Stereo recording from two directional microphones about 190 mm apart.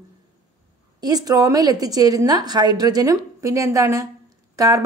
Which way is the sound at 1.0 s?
20° right (ahead or behind).